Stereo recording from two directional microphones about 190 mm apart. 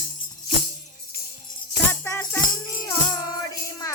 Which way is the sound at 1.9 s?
10° left (ahead or behind).